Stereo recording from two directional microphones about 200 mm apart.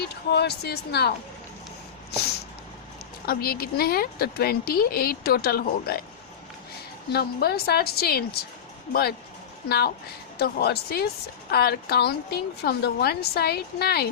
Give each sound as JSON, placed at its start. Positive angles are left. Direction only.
{"t": 0.3, "sound": "speech", "side_deg": 55}
{"t": 3.2, "sound": "a woman's voice", "side_deg": 50}
{"t": 7.1, "sound": "a woman's voice", "side_deg": 50}